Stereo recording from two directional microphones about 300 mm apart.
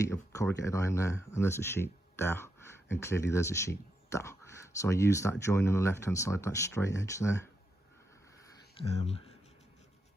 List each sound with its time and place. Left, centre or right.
0.1 s speech: centre